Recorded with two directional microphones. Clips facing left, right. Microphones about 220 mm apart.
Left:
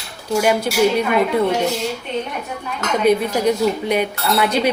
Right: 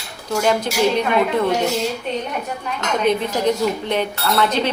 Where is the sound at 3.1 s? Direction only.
10° left (ahead or behind).